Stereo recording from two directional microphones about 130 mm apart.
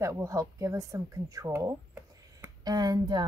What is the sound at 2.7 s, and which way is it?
Speech, 30° right (ahead or behind).